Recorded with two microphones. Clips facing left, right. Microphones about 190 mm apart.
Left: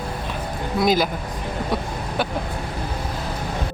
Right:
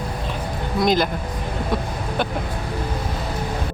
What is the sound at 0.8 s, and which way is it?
Speech, 5° left (ahead or behind).